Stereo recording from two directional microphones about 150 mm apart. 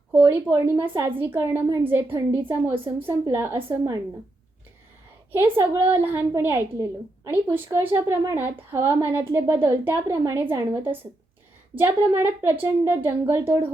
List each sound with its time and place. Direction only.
0.1 s a woman's voice: 10° right (ahead or behind)
1.6 s a woman's voice: 30° right (ahead or behind)
1.9 s a woman's voice: 15° right (ahead or behind)
5.3 s a woman's voice: 15° right (ahead or behind)